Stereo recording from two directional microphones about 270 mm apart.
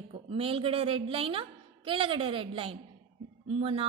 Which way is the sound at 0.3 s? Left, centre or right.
Centre.